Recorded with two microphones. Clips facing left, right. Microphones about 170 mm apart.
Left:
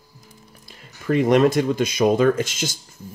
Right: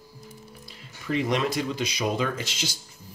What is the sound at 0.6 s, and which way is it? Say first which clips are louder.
Speech: left 8 dB; 50° left (ahead or behind).